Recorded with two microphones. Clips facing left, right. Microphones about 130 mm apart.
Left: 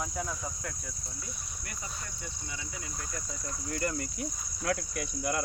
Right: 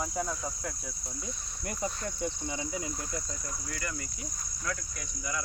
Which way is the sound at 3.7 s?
40° left (ahead or behind).